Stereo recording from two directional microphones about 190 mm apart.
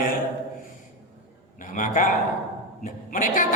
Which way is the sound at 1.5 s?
40° left (ahead or behind).